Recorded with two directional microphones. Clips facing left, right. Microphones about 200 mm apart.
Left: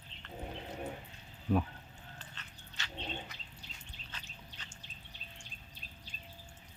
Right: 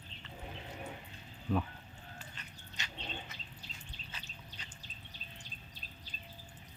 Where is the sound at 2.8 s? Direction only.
20° right (ahead or behind).